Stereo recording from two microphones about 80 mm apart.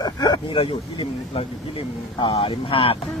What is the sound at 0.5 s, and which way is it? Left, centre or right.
Speech, left.